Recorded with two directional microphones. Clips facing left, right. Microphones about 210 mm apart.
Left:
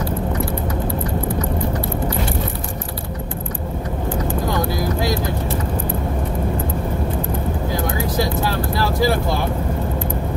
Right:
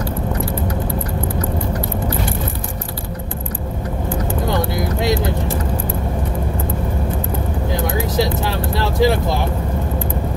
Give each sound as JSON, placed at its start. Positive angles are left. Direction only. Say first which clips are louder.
{"t": 8.2, "sound": "vehicle", "louder": "right 1 dB", "side_deg": -20}